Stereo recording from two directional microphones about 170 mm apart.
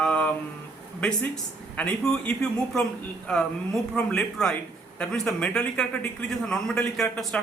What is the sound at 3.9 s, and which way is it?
A man's voice, 5° left (ahead or behind).